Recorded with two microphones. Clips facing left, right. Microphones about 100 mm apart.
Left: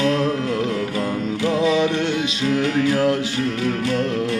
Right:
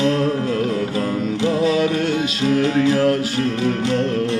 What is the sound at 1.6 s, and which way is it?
Mantra, 20° left (ahead or behind).